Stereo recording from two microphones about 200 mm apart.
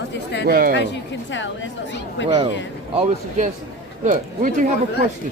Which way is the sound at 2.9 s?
35° right (ahead or behind).